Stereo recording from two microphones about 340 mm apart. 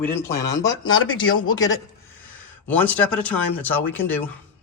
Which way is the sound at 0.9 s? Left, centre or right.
Left.